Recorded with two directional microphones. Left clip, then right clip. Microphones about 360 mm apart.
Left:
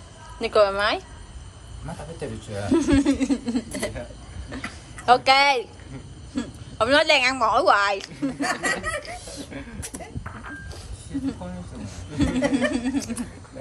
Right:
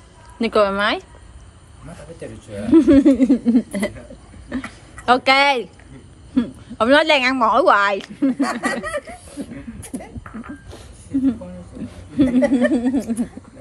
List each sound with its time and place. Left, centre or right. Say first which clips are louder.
0.4 s a woman's voice: right 2 dB; centre
2.7 s a woman's voice: right 9 dB; centre
11.8 s a woman's voice: right 8 dB; centre